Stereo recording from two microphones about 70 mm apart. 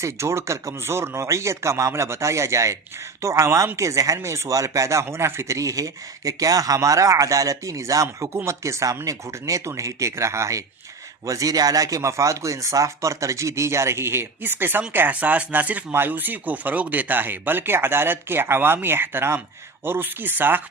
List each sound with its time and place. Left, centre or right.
0.0 s speech: right
6.7 s speech: right
11.3 s speech: right